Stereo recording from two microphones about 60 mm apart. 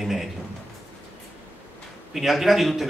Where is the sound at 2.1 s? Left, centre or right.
Centre.